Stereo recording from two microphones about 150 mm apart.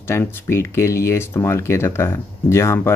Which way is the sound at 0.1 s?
15° left (ahead or behind).